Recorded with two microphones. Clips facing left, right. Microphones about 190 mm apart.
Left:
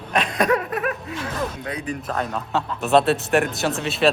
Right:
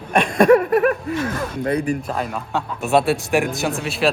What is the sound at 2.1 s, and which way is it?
Speech, 10° right (ahead or behind).